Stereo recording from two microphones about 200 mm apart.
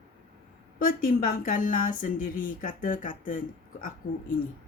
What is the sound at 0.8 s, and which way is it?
Speech, 45° left (ahead or behind).